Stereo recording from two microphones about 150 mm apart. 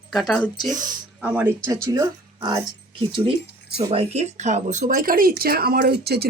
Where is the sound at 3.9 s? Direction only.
45° right (ahead or behind).